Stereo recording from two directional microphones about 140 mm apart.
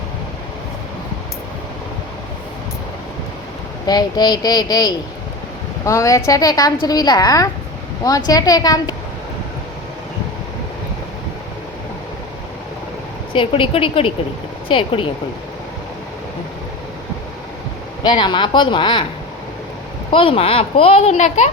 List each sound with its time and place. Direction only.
3.8 s speech: 30° left (ahead or behind)
13.3 s speech: 40° left (ahead or behind)
18.0 s speech: 30° left (ahead or behind)
20.1 s a child's voice: 40° left (ahead or behind); by 21.5 s 55° left (ahead or behind)